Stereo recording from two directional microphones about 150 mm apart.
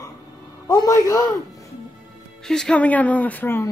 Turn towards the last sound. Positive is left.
turn(degrees=15)  # may be behind; listen again after turning